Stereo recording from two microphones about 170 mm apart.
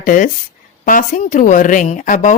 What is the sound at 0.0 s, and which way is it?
A woman's voice, 50° left (ahead or behind).